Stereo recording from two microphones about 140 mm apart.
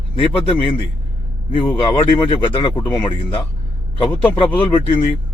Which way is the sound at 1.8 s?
35° left (ahead or behind).